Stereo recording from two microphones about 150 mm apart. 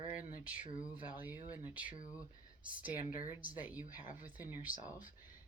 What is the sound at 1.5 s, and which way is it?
Speech, 10° right (ahead or behind).